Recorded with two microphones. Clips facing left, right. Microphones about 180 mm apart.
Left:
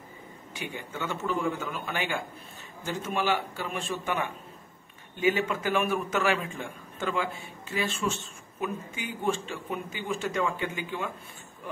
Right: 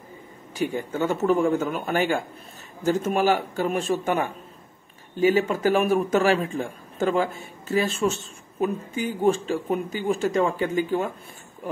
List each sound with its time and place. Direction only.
0.6 s a man's voice: 40° right (ahead or behind)